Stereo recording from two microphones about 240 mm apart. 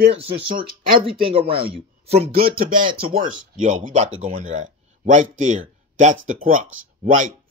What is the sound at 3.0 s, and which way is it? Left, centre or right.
Speech, right.